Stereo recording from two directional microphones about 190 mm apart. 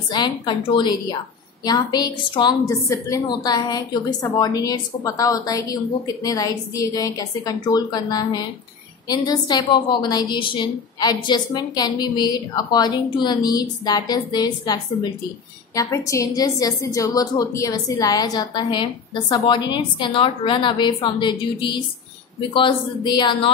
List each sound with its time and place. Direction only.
0.1 s a woman's voice: 25° left (ahead or behind)